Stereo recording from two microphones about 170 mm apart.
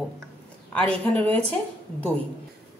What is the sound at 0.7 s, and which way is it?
Speech, 10° left (ahead or behind).